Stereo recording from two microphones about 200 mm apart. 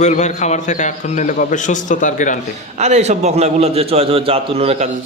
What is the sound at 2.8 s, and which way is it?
A man's voice, 35° right (ahead or behind).